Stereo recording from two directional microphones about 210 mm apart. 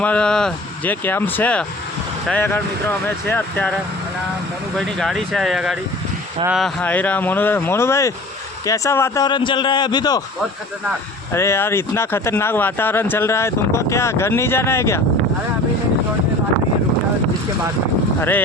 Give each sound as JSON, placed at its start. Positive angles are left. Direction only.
{"t": 0.0, "sound": "speech", "side_deg": 5}
{"t": 4.8, "sound": "a man's voice", "side_deg": 0}
{"t": 11.3, "sound": "speech", "side_deg": 10}
{"t": 18.2, "sound": "speech", "side_deg": 10}